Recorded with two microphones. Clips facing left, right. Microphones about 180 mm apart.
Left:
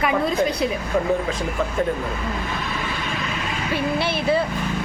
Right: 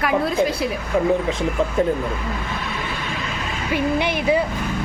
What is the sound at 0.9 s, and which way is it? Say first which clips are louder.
Speech: right 4 dB; 15° right (ahead or behind).